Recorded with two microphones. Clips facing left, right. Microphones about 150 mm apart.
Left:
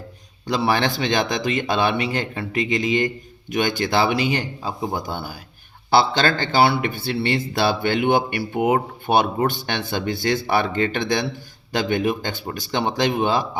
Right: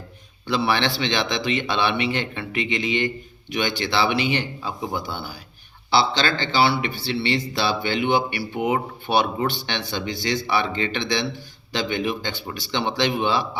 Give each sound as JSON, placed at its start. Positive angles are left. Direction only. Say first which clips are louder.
{"t": 0.4, "sound": "a man's voice", "louder": "left 2 dB", "side_deg": 40}